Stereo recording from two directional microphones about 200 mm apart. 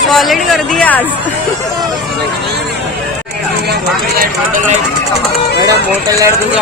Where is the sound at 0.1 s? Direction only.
Centre (ahead or behind).